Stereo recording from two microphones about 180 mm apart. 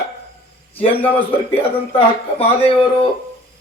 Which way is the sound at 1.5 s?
30° left (ahead or behind).